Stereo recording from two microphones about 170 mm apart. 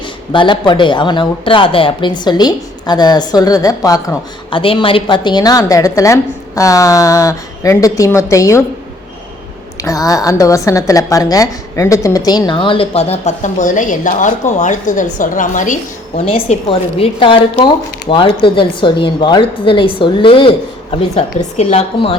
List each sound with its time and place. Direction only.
0.3 s a woman's voice: 30° left (ahead or behind)
4.5 s a woman's voice: 30° left (ahead or behind)
9.8 s a woman's voice: 20° left (ahead or behind); by 16.2 s 45° left (ahead or behind)
16.2 s a woman's voice: 35° left (ahead or behind)